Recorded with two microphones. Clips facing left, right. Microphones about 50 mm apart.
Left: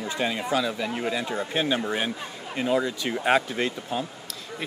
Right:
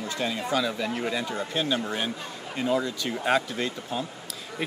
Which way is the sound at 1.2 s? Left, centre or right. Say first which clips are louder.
Left 2 dB; left.